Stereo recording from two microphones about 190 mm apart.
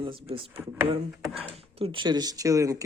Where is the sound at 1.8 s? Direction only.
30° right (ahead or behind).